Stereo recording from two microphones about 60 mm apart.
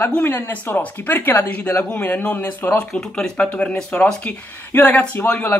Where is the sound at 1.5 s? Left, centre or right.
Left.